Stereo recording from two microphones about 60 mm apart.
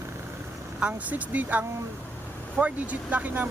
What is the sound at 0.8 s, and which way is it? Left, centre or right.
Speech, right.